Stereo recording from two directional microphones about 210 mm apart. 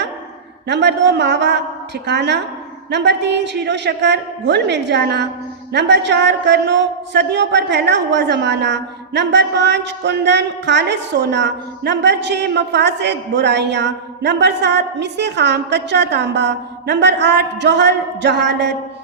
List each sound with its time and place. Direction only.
0.7 s a man's voice: 55° right (ahead or behind)